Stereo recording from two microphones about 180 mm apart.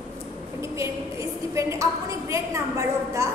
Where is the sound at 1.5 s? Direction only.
15° right (ahead or behind).